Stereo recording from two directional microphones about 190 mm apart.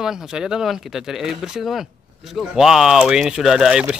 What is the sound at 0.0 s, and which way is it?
Speech, 5° right (ahead or behind).